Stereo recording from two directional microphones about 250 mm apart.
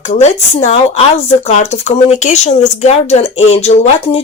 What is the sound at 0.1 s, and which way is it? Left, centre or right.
Speech, left.